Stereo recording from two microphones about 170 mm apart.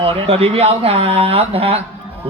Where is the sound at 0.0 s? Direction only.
35° right (ahead or behind).